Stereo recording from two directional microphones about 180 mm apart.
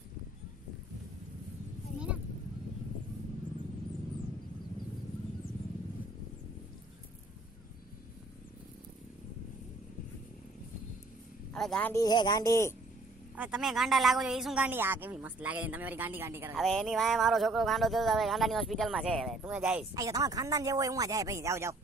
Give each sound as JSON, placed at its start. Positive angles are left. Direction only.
{"t": 11.5, "sound": "speech", "side_deg": 5}
{"t": 12.0, "sound": "speech", "side_deg": 25}
{"t": 13.3, "sound": "speech", "side_deg": -10}
{"t": 16.6, "sound": "speech", "side_deg": 0}
{"t": 19.9, "sound": "speech", "side_deg": -20}